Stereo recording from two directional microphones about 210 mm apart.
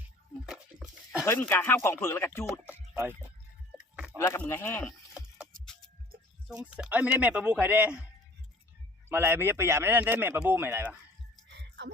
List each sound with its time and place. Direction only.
0.4 s a sound: 5° right (ahead or behind)
1.2 s speech: 10° left (ahead or behind)
2.6 s a sound: 10° right (ahead or behind)
4.2 s speech: 10° left (ahead or behind)
6.5 s speech: 5° right (ahead or behind)
9.0 s speech: 10° right (ahead or behind)